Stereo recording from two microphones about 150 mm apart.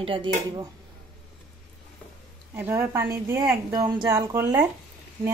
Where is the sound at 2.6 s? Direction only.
15° right (ahead or behind).